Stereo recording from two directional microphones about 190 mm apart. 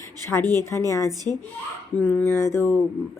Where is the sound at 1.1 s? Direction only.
20° right (ahead or behind).